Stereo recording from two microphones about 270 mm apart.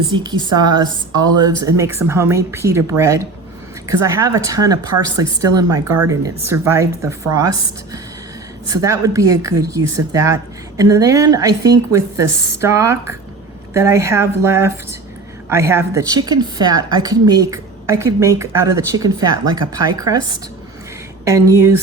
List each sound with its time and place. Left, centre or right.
0.1 s a woman's voice: centre
8.6 s a woman's voice: centre
21.2 s a woman's voice: centre